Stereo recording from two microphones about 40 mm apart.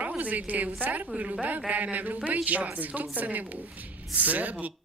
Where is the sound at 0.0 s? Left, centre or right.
Right.